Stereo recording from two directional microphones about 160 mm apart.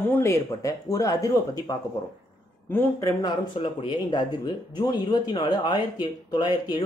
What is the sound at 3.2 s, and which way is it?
Speech, 30° left (ahead or behind).